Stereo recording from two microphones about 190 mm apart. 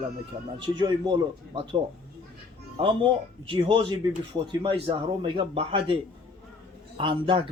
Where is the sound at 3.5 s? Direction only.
25° right (ahead or behind).